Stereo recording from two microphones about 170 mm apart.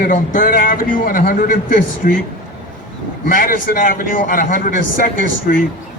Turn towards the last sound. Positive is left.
turn(degrees=55)  # may be behind; listen again after turning